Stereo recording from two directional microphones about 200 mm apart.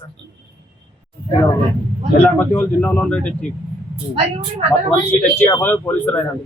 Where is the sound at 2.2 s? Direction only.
10° left (ahead or behind).